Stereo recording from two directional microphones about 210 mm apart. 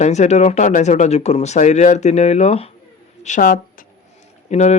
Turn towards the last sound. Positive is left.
turn(degrees=30)  # may be behind; listen again after turning